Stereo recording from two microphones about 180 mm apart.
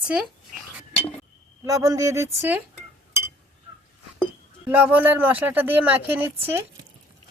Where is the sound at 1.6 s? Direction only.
20° right (ahead or behind).